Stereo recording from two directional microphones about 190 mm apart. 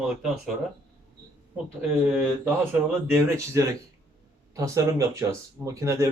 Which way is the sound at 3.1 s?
15° right (ahead or behind).